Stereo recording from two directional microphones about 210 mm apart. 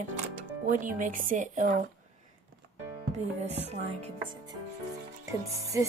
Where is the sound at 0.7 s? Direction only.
40° right (ahead or behind).